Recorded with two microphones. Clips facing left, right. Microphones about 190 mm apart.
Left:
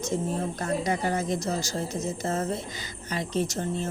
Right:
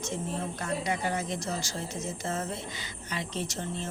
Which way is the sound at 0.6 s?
40° left (ahead or behind).